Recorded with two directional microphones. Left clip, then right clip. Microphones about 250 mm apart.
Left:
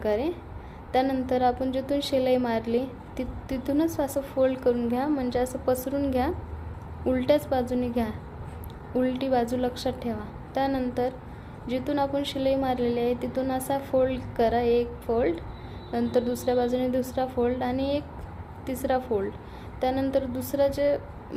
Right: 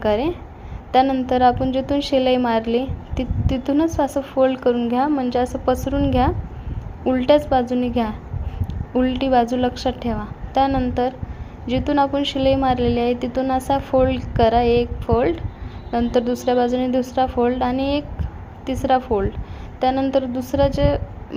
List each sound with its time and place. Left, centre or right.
0.0 s a woman's voice: centre